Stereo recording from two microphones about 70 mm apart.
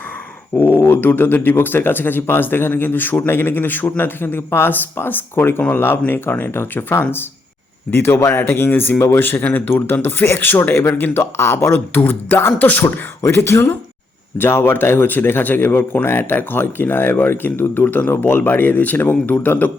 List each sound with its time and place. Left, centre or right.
0.5 s speech: left
12.8 s speech: left